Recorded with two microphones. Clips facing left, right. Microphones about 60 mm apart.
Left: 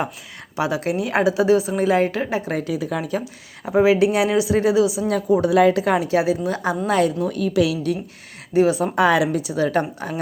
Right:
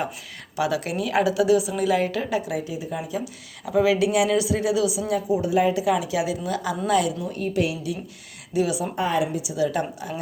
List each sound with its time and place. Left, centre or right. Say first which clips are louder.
0.5 s a woman's voice: left 3 dB; left
2.5 s speech: left 5 dB; left
3.7 s a woman's voice: left 4 dB; left
5.0 s speech: left 5 dB; left
5.8 s a woman's voice: left 4 dB; left
7.3 s a woman's voice: left 5 dB; left
8.5 s a woman's voice: left 6 dB; left
9.0 s a woman's voice: left 6 dB; left
9.5 s a woman's voice: left 4 dB; left